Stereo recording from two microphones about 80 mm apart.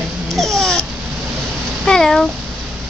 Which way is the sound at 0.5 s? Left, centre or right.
Centre.